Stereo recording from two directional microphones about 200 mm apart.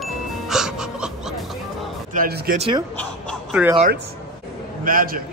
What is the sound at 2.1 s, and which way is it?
Speech, 45° right (ahead or behind).